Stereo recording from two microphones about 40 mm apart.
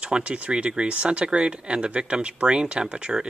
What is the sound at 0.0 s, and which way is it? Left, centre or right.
Speech, right.